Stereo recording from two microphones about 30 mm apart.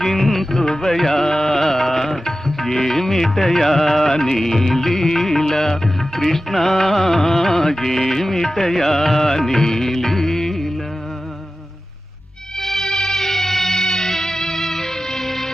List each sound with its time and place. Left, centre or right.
0.0 s music: centre
12.6 s music: centre